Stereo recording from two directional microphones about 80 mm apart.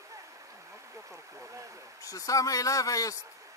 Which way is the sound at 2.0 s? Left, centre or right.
Left.